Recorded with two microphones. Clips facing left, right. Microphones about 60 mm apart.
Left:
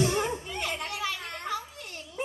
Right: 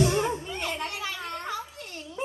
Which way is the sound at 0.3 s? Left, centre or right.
Right.